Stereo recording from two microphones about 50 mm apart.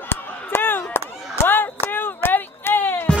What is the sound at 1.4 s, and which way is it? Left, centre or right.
Music, left.